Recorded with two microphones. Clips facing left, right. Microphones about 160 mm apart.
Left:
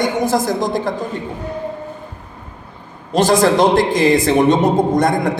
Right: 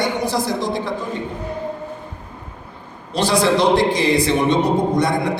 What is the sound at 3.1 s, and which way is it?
A man's voice, 45° left (ahead or behind).